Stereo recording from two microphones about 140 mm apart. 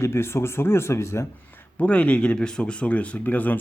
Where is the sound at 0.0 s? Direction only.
20° left (ahead or behind).